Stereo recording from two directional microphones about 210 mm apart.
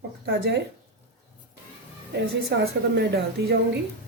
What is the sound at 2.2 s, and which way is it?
A woman's voice, 55° right (ahead or behind).